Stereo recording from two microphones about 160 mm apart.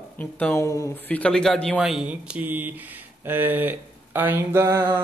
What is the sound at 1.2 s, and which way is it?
Speech, 5° left (ahead or behind).